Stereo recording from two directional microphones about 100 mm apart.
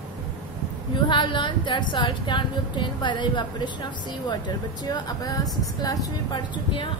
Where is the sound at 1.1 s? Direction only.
55° left (ahead or behind).